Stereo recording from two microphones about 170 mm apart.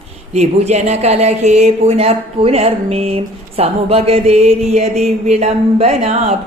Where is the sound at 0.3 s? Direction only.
40° right (ahead or behind).